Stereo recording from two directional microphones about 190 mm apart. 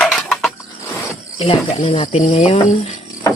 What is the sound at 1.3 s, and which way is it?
Speech, 25° left (ahead or behind).